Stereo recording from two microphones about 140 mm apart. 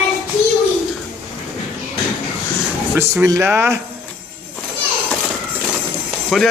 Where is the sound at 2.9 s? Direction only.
10° right (ahead or behind).